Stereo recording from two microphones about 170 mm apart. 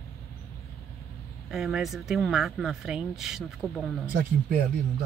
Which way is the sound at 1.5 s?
Centre (ahead or behind).